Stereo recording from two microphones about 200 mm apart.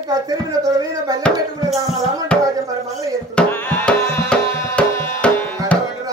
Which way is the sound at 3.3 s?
10° left (ahead or behind).